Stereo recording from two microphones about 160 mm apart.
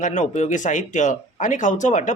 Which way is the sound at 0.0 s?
50° left (ahead or behind).